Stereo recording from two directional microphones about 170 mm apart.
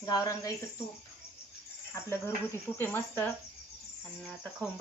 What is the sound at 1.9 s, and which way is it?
Speech, 15° left (ahead or behind).